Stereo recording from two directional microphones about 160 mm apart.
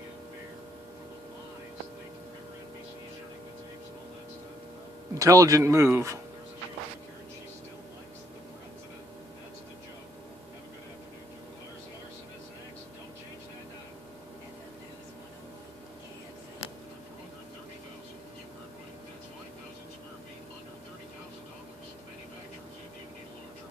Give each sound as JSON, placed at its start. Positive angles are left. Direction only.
{"t": 5.1, "sound": "speech", "side_deg": -20}